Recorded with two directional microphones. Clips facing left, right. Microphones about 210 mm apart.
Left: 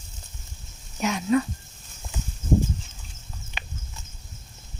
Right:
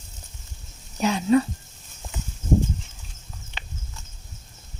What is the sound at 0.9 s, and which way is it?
Speech, 30° right (ahead or behind).